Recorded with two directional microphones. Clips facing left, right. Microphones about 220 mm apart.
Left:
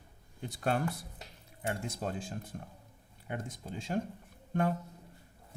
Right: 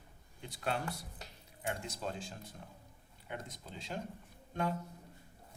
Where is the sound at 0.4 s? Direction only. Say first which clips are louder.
Left 6 dB; 50° left (ahead or behind).